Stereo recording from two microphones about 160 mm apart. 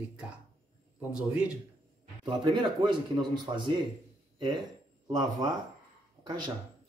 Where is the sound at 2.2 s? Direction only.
30° right (ahead or behind).